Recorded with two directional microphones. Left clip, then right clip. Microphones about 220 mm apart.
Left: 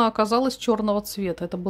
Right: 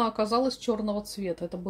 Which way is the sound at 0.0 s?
25° left (ahead or behind).